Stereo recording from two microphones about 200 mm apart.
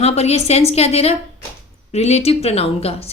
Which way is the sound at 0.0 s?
30° left (ahead or behind).